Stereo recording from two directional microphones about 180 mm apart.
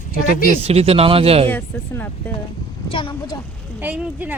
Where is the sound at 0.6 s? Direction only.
35° right (ahead or behind).